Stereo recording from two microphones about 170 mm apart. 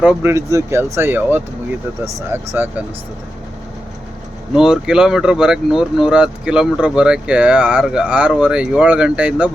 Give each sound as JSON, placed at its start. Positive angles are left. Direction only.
{"t": 0.0, "sound": "speech", "side_deg": -10}
{"t": 4.5, "sound": "speech", "side_deg": -5}